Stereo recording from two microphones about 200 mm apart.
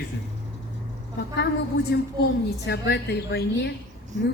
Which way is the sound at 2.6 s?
60° left (ahead or behind).